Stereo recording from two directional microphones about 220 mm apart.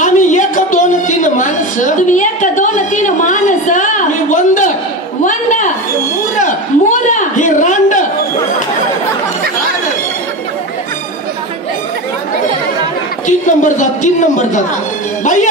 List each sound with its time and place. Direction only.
0.0 s a sound: 35° left (ahead or behind)
13.5 s a man's voice: 35° left (ahead or behind)
15.2 s music: 35° left (ahead or behind)